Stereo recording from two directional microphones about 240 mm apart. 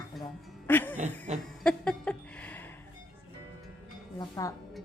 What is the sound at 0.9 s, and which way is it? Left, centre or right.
Speech, right.